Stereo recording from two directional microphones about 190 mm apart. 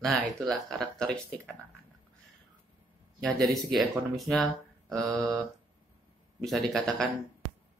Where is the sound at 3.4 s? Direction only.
Centre (ahead or behind).